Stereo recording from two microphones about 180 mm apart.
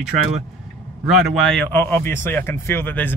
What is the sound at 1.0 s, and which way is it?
Speech, centre (ahead or behind).